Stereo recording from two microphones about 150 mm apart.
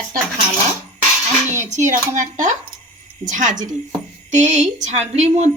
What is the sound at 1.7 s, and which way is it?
A woman's voice, 55° right (ahead or behind).